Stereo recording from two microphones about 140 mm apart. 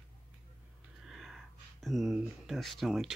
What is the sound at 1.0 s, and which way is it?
Speech, centre (ahead or behind).